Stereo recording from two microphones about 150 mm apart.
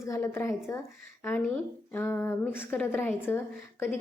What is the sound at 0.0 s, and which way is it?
Speech, 15° left (ahead or behind).